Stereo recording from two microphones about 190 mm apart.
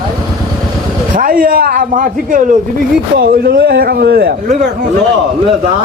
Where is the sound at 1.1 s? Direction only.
50° right (ahead or behind).